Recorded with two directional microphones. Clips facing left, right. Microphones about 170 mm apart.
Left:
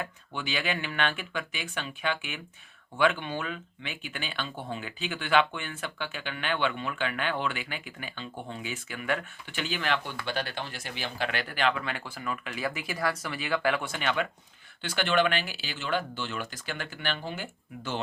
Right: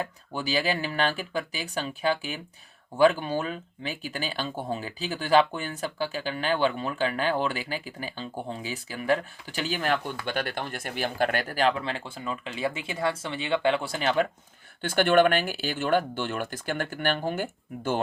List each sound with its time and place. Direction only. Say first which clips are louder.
0.0 s speech: right 4 dB; 35° right (ahead or behind)
14.8 s speech: right 6 dB; 50° right (ahead or behind)